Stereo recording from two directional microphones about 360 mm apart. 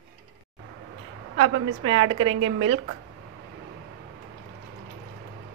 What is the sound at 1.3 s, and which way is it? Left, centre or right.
A woman's voice, right.